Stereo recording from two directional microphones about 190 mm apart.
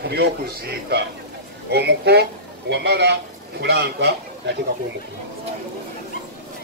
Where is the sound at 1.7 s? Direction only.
60° right (ahead or behind).